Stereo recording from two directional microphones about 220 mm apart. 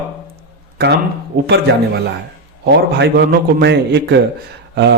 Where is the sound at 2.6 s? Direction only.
50° right (ahead or behind).